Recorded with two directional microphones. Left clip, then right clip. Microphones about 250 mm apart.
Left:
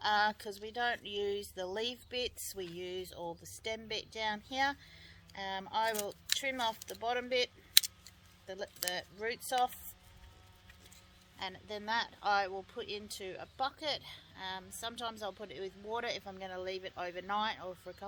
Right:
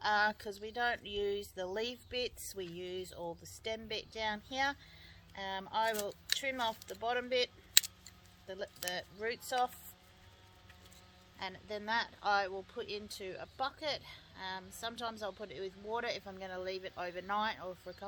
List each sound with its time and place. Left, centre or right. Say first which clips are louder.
0.0 s speech: left 1 dB; left
7.7 s scissors: left 2 dB; centre
8.4 s speech: left 1 dB; left
11.3 s speech: even; left